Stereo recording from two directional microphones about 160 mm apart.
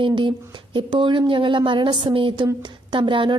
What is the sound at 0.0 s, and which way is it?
A woman's voice, 30° right (ahead or behind).